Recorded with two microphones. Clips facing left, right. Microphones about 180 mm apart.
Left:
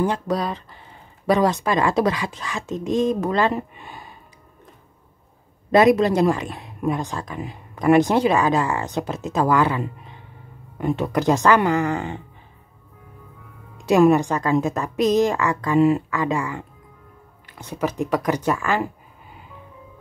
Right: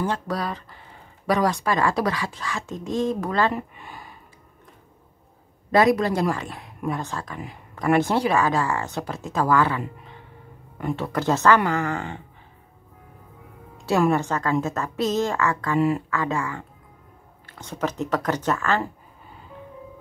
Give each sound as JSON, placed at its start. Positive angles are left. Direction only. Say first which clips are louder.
{"t": 0.0, "sound": "speech", "louder": "left 4 dB", "side_deg": 20}
{"t": 5.7, "sound": "a woman's voice", "louder": "left 4 dB", "side_deg": 20}
{"t": 13.8, "sound": "a woman's voice", "louder": "left 5 dB", "side_deg": 15}